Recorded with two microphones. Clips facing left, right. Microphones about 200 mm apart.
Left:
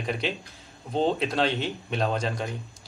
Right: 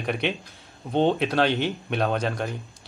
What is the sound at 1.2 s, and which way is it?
Speech, centre (ahead or behind).